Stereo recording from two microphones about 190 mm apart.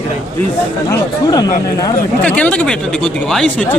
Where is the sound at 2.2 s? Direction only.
5° left (ahead or behind).